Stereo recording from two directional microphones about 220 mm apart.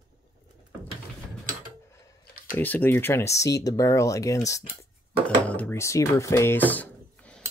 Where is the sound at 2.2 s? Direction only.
45° left (ahead or behind).